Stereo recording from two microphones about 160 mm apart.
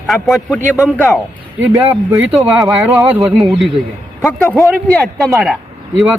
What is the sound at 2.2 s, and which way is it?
Speech, 5° right (ahead or behind).